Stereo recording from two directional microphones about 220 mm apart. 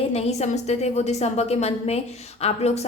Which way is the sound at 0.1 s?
30° left (ahead or behind).